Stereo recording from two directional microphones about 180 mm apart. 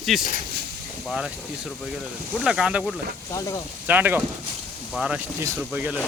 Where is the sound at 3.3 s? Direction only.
20° left (ahead or behind).